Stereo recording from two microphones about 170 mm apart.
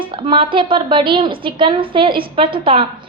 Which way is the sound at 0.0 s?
30° right (ahead or behind).